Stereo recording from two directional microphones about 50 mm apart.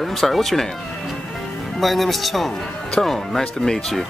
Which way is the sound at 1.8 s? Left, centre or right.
Centre.